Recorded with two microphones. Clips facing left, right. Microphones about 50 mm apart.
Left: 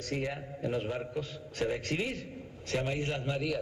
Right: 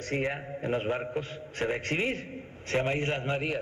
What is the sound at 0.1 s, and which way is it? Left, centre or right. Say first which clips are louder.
Speech: right 5 dB; right.